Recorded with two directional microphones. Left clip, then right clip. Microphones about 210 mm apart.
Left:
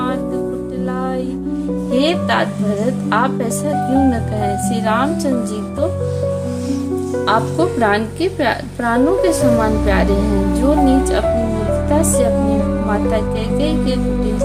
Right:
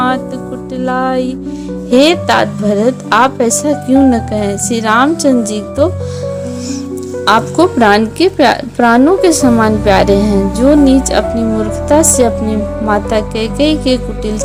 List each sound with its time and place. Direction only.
0.9 s music: 30° right (ahead or behind)
1.9 s a woman's voice: 35° right (ahead or behind)
7.3 s a woman's voice: 35° right (ahead or behind)